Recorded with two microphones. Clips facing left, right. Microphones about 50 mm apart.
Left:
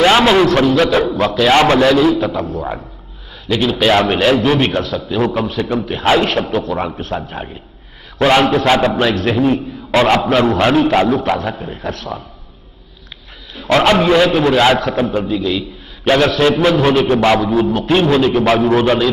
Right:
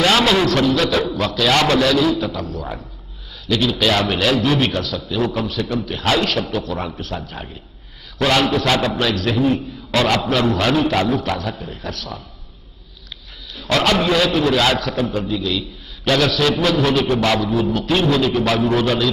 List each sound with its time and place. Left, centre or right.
0.0 s a man's voice: left
2.0 s a man's voice: centre
3.4 s a man's voice: left
6.1 s a man's voice: left
6.7 s a man's voice: centre
8.2 s a man's voice: left
13.6 s a man's voice: left
16.1 s a man's voice: left